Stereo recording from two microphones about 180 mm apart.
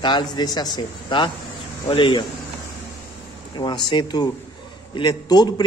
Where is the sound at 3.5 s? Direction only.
25° left (ahead or behind).